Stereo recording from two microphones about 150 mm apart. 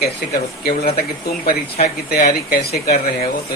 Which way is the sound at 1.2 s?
90° left.